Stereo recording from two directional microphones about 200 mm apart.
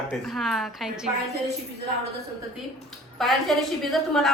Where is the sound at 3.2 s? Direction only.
Centre (ahead or behind).